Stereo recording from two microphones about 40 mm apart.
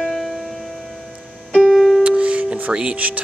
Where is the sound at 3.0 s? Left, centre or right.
Right.